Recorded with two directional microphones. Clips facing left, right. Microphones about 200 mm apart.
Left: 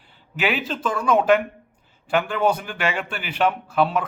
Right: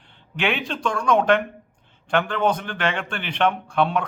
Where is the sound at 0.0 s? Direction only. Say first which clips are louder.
Even; 5° left (ahead or behind).